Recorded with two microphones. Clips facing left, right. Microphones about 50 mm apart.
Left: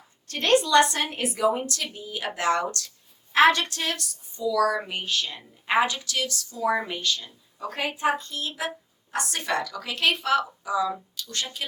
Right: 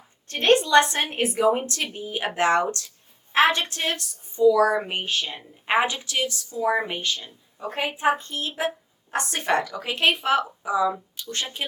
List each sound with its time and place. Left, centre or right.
0.3 s a woman's voice: right